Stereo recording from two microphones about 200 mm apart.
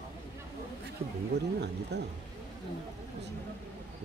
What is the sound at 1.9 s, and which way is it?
Speech, 55° right (ahead or behind).